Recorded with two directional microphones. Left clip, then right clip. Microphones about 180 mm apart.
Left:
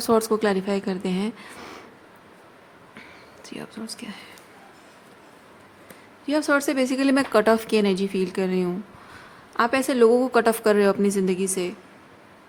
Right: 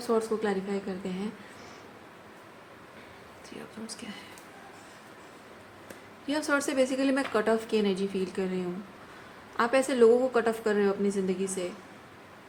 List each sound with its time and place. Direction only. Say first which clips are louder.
0.1 s speech: left 7 dB; 55° left (ahead or behind)
3.8 s speech: left 5 dB; 40° left (ahead or behind)
6.2 s a woman's voice: left 7 dB; 40° left (ahead or behind)